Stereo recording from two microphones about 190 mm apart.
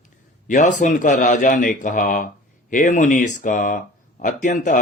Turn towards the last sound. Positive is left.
turn(degrees=40)  # may be behind; listen again after turning